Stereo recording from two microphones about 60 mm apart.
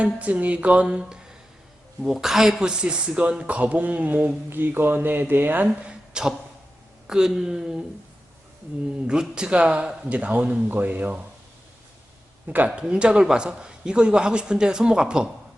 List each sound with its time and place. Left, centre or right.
0.0 s a man's voice: right
5.8 s a man's voice: centre
9.0 s a man's voice: centre
12.5 s a man's voice: right
12.8 s a man's voice: centre